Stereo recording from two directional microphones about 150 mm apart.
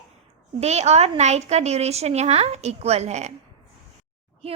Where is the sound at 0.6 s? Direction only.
45° right (ahead or behind).